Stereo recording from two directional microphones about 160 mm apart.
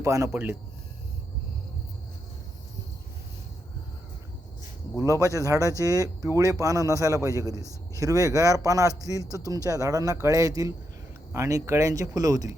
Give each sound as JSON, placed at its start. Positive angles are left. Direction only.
{"t": 0.0, "sound": "speech", "side_deg": -20}
{"t": 4.9, "sound": "a man's voice", "side_deg": -20}